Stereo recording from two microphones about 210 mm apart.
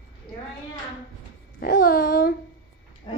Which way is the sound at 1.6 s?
45° left (ahead or behind).